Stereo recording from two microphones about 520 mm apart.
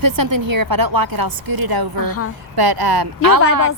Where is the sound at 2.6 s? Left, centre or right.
Right.